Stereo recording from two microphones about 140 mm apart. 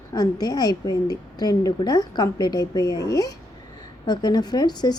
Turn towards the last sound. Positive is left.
turn(degrees=30)  # may be behind; listen again after turning